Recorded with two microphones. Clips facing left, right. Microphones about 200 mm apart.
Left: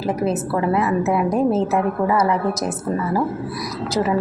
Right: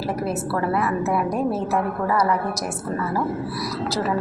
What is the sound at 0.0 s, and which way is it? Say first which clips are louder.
A woman's voice: left 4 dB; 20° left (ahead or behind).